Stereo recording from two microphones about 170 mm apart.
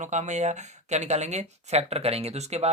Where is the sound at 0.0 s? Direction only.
45° right (ahead or behind).